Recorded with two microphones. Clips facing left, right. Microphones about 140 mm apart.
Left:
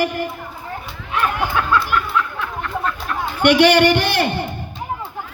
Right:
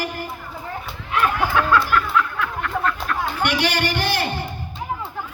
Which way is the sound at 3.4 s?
65° left (ahead or behind).